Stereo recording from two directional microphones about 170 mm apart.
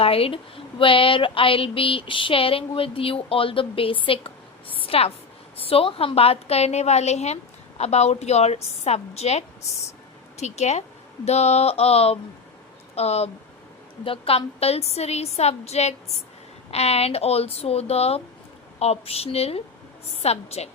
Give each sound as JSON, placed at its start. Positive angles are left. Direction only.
{"t": 0.0, "sound": "a woman's voice", "side_deg": 35}